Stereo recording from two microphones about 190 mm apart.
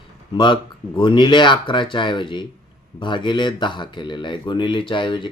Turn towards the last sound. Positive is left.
turn(degrees=25)  # may be behind; listen again after turning